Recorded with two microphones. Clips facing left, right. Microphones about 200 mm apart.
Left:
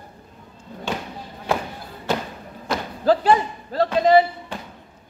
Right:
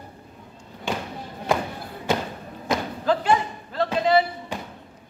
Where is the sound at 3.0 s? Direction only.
35° left (ahead or behind).